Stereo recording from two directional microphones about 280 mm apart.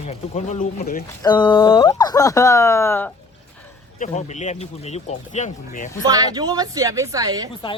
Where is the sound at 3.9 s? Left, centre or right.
Left.